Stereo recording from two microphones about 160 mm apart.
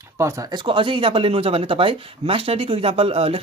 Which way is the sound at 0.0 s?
15° right (ahead or behind).